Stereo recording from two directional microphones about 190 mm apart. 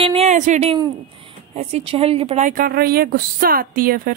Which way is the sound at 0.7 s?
25° right (ahead or behind).